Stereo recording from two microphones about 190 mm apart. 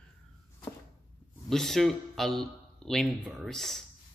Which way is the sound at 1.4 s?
Centre (ahead or behind).